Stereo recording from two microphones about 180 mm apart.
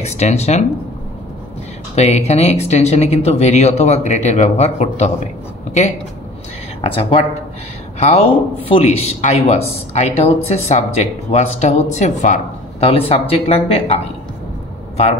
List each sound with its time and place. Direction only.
0.0 s speech: 40° left (ahead or behind)
2.0 s speech: 40° left (ahead or behind)
6.8 s speech: 30° left (ahead or behind)